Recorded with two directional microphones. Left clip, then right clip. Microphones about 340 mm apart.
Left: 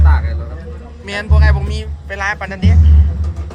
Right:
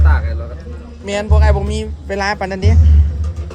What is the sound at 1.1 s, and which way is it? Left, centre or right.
Speech, centre.